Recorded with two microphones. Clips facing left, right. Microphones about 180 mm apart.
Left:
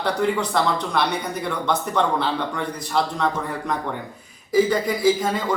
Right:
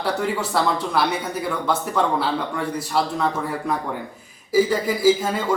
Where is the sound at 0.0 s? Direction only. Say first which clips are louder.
Left 2 dB; 5° right (ahead or behind).